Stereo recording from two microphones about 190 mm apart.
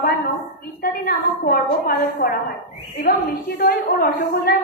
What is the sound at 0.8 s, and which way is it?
A woman's voice, 50° left (ahead or behind).